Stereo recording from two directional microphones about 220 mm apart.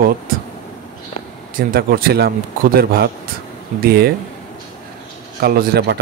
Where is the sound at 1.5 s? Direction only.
40° right (ahead or behind).